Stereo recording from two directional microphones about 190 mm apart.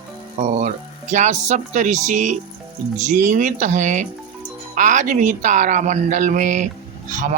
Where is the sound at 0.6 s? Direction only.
40° right (ahead or behind).